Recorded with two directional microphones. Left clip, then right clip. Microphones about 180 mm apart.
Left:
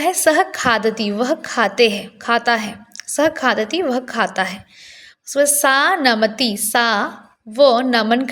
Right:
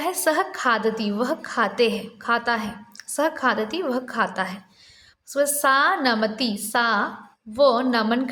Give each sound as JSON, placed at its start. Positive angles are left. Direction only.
{"t": 0.0, "sound": "a woman's voice", "side_deg": 20}